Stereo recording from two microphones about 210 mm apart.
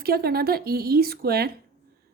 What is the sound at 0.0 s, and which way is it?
Speech, 45° right (ahead or behind).